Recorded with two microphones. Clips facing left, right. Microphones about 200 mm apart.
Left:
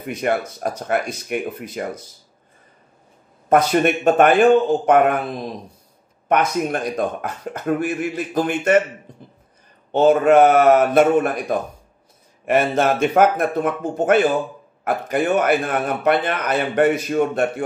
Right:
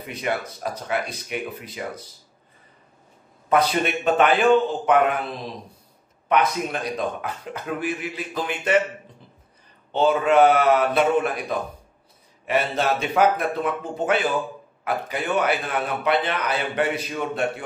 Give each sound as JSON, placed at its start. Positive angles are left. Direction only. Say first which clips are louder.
{"t": 0.0, "sound": "a man's voice", "louder": "left 6 dB", "side_deg": 50}
{"t": 3.4, "sound": "a man's voice", "louder": "left 5 dB", "side_deg": 50}
{"t": 6.2, "sound": "a man's voice", "louder": "left 3 dB", "side_deg": 45}
{"t": 9.1, "sound": "a sound", "louder": "left 7 dB", "side_deg": 45}
{"t": 9.9, "sound": "a man's voice", "louder": "left 5 dB", "side_deg": 50}